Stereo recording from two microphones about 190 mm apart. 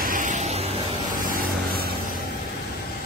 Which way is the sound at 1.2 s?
45° right (ahead or behind).